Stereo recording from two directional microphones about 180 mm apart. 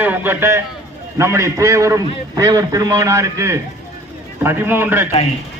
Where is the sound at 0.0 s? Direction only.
10° right (ahead or behind).